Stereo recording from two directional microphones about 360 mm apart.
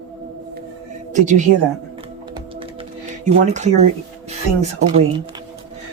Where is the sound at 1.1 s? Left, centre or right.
Centre.